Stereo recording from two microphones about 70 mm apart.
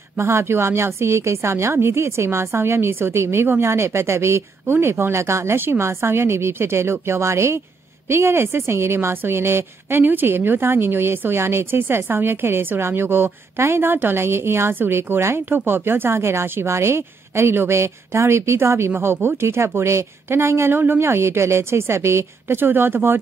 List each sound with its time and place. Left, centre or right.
0.2 s a woman's voice: right